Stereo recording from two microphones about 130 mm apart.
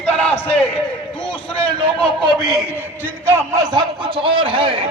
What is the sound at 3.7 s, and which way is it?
Speech, 35° right (ahead or behind).